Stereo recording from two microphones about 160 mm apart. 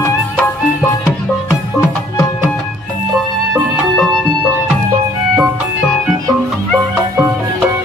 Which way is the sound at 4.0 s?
Centre (ahead or behind).